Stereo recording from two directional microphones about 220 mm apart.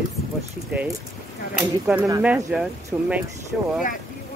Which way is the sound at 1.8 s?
5° right (ahead or behind).